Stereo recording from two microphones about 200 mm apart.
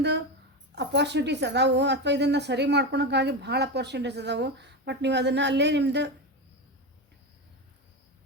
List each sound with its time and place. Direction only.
0.8 s a woman's voice: 60° right (ahead or behind)